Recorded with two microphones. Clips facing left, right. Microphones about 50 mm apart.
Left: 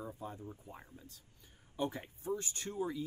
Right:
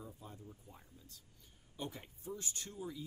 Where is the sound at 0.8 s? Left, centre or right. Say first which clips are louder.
Left 6 dB; left.